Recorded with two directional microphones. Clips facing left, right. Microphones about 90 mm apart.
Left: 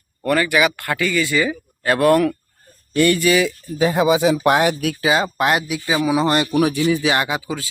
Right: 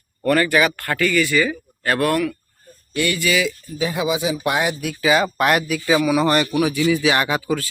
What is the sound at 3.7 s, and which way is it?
Speech, 50° left (ahead or behind).